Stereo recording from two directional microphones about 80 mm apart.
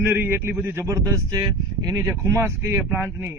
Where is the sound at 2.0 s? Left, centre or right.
Right.